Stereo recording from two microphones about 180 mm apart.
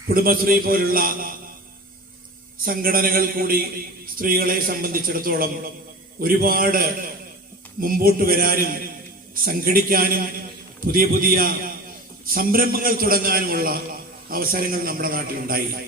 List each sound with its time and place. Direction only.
0.1 s a man's voice: 55° right (ahead or behind)
2.6 s a man's voice: 55° right (ahead or behind)